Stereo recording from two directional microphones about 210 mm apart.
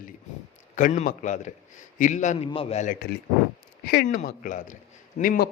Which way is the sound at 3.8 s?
50° left (ahead or behind).